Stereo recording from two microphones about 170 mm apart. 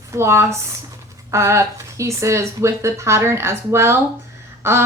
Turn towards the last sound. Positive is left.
turn(degrees=-15)  # may be behind; listen again after turning